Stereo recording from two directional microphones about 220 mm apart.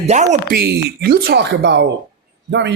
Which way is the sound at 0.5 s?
45° right (ahead or behind).